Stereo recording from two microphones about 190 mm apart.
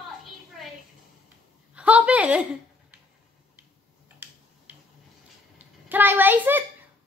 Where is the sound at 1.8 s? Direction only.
5° right (ahead or behind).